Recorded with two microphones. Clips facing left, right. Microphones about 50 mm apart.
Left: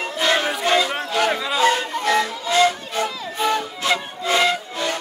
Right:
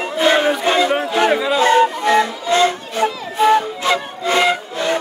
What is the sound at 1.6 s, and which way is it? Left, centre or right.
Music, right.